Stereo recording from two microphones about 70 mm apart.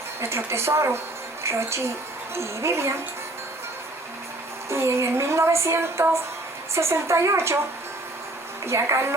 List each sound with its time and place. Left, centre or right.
0.2 s music: right
4.7 s music: right
8.6 s music: right